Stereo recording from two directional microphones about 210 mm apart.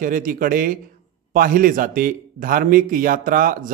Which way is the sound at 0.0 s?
40° right (ahead or behind).